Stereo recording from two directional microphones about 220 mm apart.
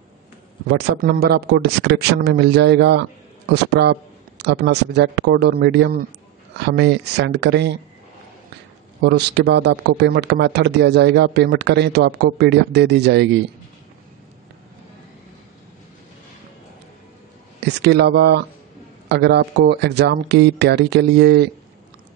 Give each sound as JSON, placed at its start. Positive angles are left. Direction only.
{"t": 0.7, "sound": "speech", "side_deg": -50}
{"t": 9.0, "sound": "speech", "side_deg": -50}
{"t": 17.6, "sound": "speech", "side_deg": -50}